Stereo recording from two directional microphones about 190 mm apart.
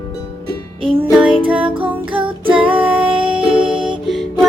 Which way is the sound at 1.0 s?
5° right (ahead or behind).